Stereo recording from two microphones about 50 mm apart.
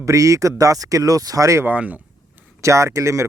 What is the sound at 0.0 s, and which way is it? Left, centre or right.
Speech, right.